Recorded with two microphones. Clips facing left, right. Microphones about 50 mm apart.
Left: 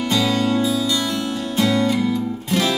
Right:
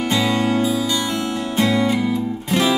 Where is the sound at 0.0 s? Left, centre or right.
Right.